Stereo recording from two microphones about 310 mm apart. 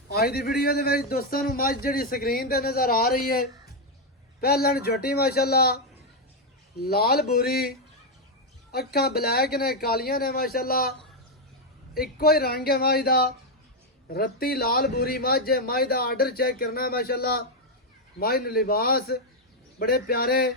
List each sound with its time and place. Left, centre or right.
0.1 s a man's voice: left
6.8 s a man's voice: left
8.7 s a man's voice: left
11.9 s a man's voice: left